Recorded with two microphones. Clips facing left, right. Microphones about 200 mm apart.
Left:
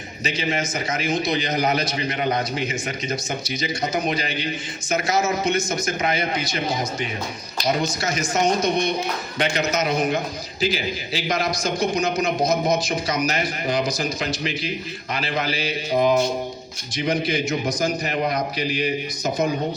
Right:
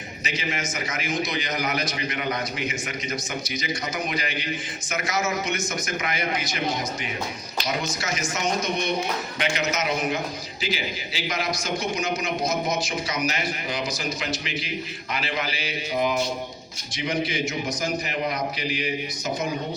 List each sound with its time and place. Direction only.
0.3 s a man's voice: 30° left (ahead or behind)
7.6 s a man's voice: 35° left (ahead or behind)